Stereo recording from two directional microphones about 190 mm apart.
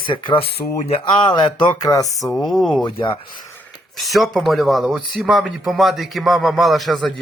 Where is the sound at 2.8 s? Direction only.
25° left (ahead or behind).